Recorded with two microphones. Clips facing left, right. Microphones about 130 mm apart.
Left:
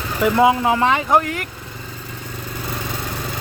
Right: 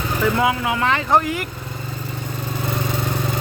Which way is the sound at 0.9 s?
10° left (ahead or behind).